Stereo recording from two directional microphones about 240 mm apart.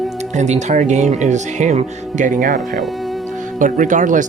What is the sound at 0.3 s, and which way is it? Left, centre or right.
Speech, right.